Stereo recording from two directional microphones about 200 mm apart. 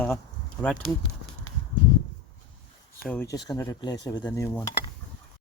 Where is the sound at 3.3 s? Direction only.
20° left (ahead or behind).